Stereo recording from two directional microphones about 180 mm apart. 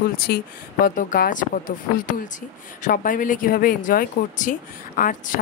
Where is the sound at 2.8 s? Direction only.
50° left (ahead or behind).